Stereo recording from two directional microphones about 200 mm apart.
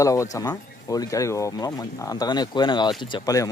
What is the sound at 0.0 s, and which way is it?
Speech, 15° left (ahead or behind).